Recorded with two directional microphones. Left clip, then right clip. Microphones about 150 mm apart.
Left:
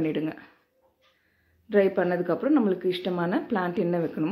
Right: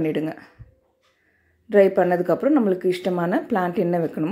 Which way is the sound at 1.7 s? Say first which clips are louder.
Right 6 dB; 30° right (ahead or behind).